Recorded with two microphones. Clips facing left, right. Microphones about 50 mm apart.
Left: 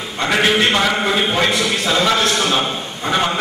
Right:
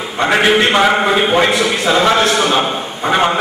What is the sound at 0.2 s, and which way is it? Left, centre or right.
A man's voice, centre.